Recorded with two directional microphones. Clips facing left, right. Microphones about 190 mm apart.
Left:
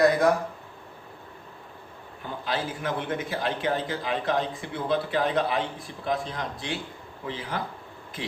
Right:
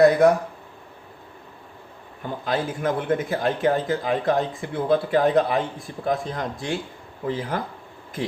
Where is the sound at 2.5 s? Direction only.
50° right (ahead or behind).